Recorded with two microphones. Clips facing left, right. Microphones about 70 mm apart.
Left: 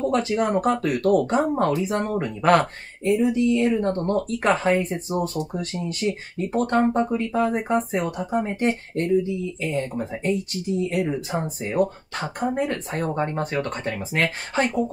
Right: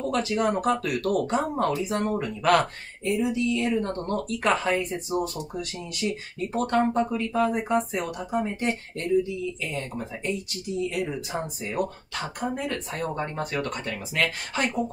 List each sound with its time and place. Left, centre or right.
0.0 s a sound: left
0.4 s speech: left
2.2 s speech: left